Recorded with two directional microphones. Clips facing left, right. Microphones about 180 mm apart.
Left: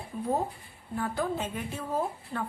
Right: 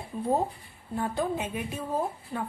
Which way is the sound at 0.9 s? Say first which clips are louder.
Right 1 dB; 25° right (ahead or behind).